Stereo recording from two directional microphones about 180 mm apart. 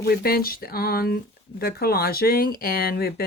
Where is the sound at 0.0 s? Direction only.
60° left (ahead or behind).